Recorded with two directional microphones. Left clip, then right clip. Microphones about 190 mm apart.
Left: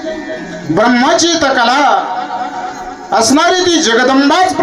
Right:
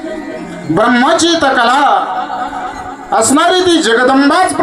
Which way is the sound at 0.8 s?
25° left (ahead or behind).